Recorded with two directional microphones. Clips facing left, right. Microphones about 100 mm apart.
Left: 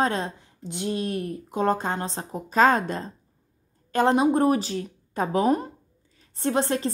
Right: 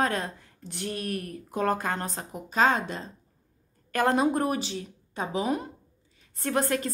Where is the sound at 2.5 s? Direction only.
45° left (ahead or behind).